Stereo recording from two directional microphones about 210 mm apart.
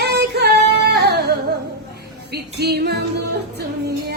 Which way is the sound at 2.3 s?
50° right (ahead or behind).